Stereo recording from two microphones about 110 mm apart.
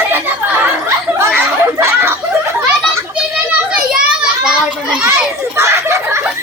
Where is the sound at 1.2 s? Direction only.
20° right (ahead or behind).